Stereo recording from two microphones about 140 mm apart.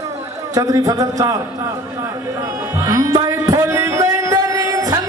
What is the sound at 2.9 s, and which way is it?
Music, 25° right (ahead or behind).